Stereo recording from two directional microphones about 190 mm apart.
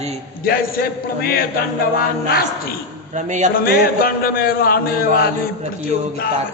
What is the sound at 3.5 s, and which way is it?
Speech, 50° left (ahead or behind).